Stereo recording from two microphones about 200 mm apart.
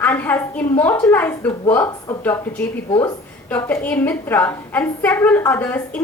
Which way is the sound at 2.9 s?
20° left (ahead or behind).